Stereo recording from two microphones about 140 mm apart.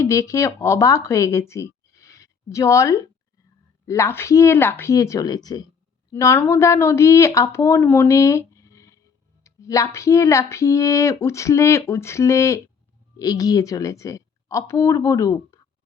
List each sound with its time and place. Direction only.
0.0 s a woman's voice: 20° left (ahead or behind)